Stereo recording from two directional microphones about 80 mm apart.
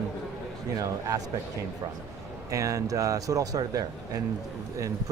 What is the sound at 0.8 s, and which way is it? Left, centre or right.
Speech, right.